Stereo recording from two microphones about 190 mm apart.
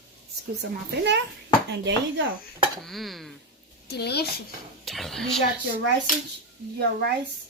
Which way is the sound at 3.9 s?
60° left (ahead or behind).